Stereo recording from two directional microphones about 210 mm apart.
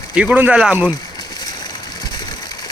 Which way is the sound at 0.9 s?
20° left (ahead or behind).